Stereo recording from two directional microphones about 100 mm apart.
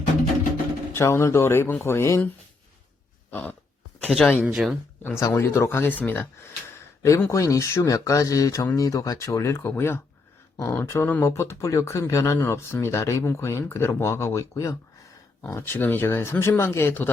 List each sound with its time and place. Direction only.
0.9 s speech: 25° left (ahead or behind)
4.0 s speech: 10° left (ahead or behind)
4.4 s speech: 5° right (ahead or behind)
5.2 s speech: 30° left (ahead or behind)
7.0 s speech: 30° left (ahead or behind)